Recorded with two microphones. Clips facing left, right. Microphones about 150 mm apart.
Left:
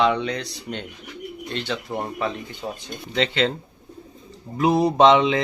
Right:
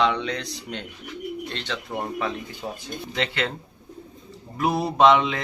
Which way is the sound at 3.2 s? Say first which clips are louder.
Left 6 dB; 25° left (ahead or behind).